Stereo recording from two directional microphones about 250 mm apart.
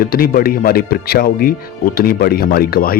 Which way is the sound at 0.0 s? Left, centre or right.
Left.